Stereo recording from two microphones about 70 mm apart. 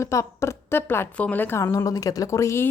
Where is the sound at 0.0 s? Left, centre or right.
Left.